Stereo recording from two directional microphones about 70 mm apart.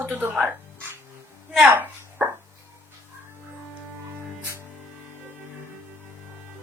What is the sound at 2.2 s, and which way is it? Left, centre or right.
Chopping, right.